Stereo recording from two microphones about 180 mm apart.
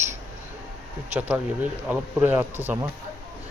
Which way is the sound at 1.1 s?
10° right (ahead or behind).